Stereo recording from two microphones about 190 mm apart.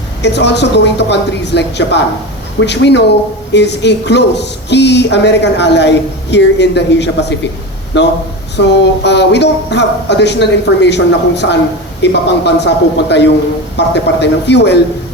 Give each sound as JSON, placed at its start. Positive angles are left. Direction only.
{"t": 0.2, "sound": "speech", "side_deg": 65}